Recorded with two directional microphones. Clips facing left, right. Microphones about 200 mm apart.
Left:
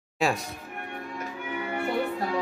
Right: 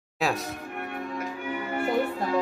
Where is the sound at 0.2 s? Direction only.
Centre (ahead or behind).